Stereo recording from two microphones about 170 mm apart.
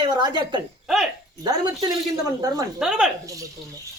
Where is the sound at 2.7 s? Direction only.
5° right (ahead or behind).